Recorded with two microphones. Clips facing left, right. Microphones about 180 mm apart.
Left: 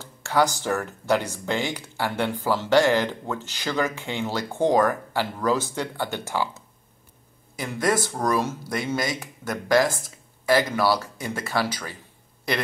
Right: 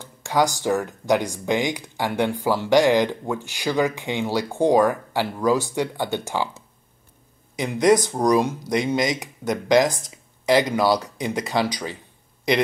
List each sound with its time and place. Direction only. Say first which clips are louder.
0.0 s speech: right 1 dB; 15° right (ahead or behind)
7.5 s speech: right 7 dB; 20° right (ahead or behind)